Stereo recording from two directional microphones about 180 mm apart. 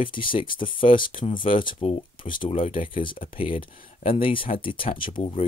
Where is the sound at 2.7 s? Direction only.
50° left (ahead or behind).